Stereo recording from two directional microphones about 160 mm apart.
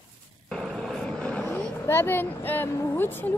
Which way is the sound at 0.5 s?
Centre (ahead or behind).